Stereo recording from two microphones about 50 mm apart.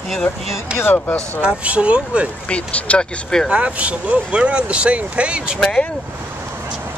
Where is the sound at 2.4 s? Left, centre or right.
Left.